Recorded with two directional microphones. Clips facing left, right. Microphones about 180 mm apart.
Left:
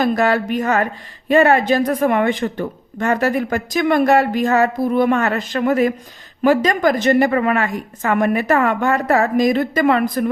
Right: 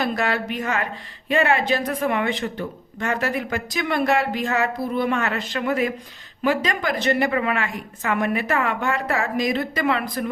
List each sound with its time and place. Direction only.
0.0 s speech: 45° left (ahead or behind)